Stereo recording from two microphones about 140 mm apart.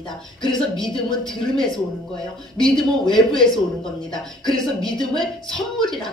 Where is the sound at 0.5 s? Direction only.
5° left (ahead or behind).